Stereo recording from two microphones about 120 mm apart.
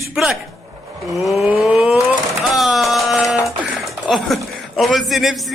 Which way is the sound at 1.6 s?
5° right (ahead or behind).